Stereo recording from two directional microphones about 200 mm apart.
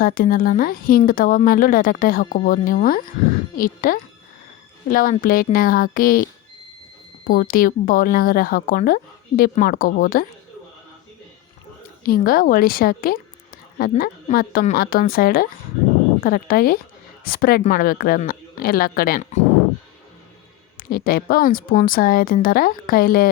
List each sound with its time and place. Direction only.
0.0 s speech: 45° left (ahead or behind)
7.3 s speech: 45° left (ahead or behind)
12.0 s speech: 45° left (ahead or behind)
20.7 s speech: 50° left (ahead or behind)